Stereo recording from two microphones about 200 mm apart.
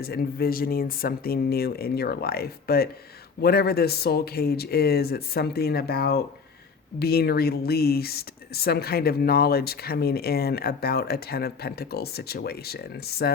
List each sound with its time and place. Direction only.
0.0 s speech: 50° left (ahead or behind)